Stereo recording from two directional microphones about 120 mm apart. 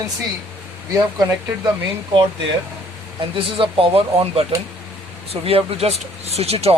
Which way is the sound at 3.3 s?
50° right (ahead or behind).